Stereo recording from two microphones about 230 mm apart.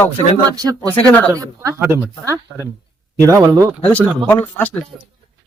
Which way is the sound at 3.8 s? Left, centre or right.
Centre.